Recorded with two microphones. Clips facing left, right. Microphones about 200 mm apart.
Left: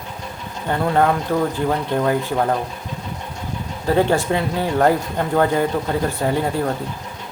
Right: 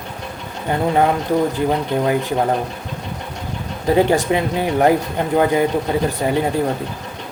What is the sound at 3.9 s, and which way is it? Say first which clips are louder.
Speech: right 2 dB; 15° right (ahead or behind).